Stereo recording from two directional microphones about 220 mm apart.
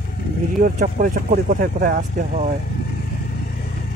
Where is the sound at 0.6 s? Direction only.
40° right (ahead or behind).